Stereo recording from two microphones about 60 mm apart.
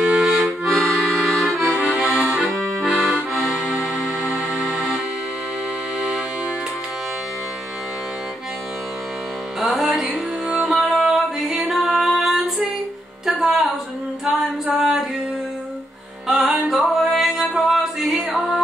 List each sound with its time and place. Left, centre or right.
0.0 s accordion: centre
0.7 s accordion: centre
1.8 s accordion: right
3.3 s accordion: centre
3.6 s music: centre
5.9 s music: centre
9.6 s music: centre
14.3 s a sound: centre
16.3 s music: centre